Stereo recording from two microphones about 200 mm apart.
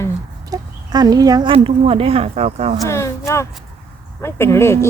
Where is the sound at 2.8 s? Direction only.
15° left (ahead or behind).